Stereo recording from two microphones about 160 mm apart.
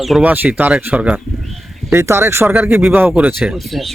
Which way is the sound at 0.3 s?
10° right (ahead or behind).